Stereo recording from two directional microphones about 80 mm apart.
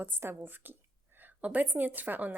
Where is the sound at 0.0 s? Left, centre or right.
Right.